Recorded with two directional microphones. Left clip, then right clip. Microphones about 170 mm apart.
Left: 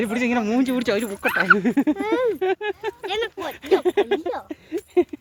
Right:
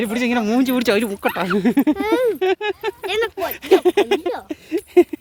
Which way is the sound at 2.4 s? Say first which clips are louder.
Right 4 dB; 45° right (ahead or behind).